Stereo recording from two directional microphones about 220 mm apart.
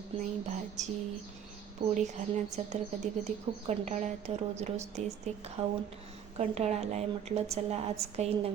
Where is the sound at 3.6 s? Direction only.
30° right (ahead or behind).